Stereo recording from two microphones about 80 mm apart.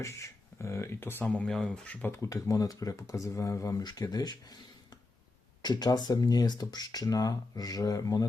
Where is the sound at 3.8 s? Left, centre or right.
Left.